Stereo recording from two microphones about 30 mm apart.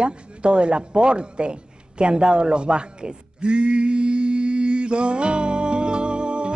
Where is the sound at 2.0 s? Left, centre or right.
Right.